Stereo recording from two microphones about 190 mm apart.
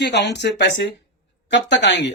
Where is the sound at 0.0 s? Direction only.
65° left (ahead or behind).